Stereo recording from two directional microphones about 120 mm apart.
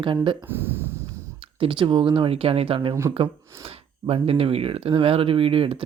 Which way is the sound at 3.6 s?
55° right (ahead or behind).